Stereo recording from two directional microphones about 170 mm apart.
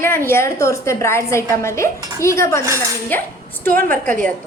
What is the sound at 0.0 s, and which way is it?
A woman's voice, 15° left (ahead or behind).